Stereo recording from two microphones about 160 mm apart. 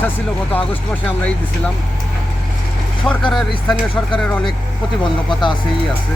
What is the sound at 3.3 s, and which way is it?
Speech, centre (ahead or behind).